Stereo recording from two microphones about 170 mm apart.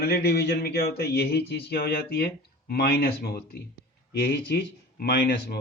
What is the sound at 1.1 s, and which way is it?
Speech, 75° left (ahead or behind).